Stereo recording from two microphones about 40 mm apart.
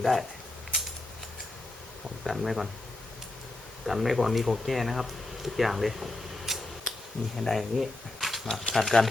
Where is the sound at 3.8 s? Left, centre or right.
Centre.